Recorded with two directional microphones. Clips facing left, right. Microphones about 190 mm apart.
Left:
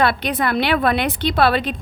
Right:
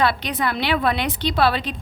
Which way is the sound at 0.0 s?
55° left (ahead or behind).